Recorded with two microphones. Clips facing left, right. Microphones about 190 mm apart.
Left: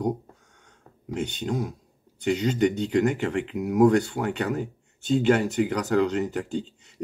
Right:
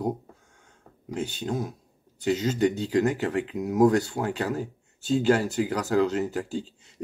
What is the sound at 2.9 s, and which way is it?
Speech, 35° right (ahead or behind).